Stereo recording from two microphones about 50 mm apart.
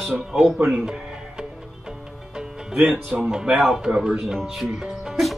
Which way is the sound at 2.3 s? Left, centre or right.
Centre.